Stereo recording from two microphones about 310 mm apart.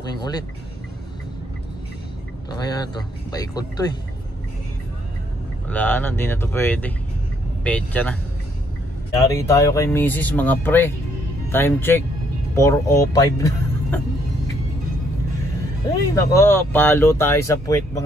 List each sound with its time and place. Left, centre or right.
0.2 s speech: centre
2.5 s speech: centre
5.7 s speech: centre
9.3 s speech: centre
16.3 s speech: centre